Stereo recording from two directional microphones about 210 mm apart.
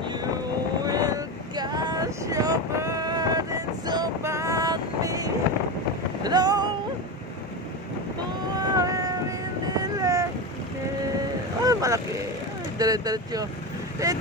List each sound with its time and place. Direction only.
0.0 s vehicle: 20° right (ahead or behind)
6.2 s boat: 20° right (ahead or behind)
8.5 s a sound: 15° right (ahead or behind)
9.7 s vehicle: 15° right (ahead or behind)
11.6 s vehicle: 15° right (ahead or behind)
12.7 s speech: 20° right (ahead or behind)